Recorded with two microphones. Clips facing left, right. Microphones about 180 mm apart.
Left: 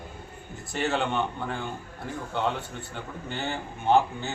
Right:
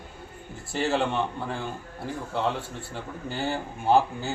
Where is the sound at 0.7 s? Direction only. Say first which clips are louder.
Right 2 dB; 30° right (ahead or behind).